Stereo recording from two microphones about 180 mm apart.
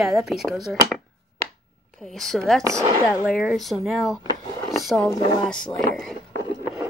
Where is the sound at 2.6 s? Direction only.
15° right (ahead or behind).